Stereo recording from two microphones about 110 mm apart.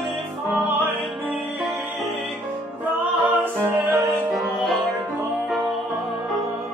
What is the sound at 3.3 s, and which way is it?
Music, 20° right (ahead or behind).